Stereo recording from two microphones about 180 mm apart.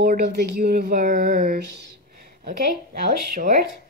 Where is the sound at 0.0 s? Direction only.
60° right (ahead or behind).